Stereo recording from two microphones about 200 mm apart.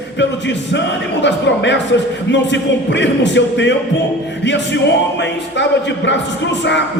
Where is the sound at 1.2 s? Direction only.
60° left (ahead or behind).